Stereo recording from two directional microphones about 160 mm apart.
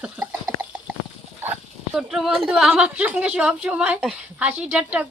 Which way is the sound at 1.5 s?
5° right (ahead or behind).